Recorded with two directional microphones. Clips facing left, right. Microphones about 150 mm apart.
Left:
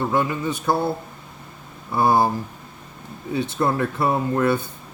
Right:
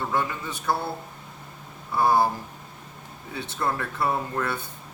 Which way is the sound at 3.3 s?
15° left (ahead or behind).